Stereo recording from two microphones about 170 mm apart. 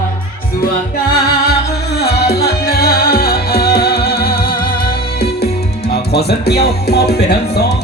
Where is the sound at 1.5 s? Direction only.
70° left (ahead or behind).